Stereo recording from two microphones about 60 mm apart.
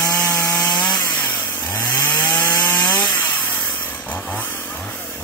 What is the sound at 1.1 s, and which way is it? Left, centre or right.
Chainsaw, left.